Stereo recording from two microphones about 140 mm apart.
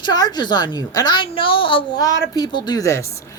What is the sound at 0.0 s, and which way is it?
Speech, 30° left (ahead or behind).